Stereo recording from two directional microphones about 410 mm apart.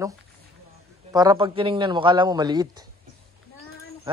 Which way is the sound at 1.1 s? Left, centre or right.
Centre.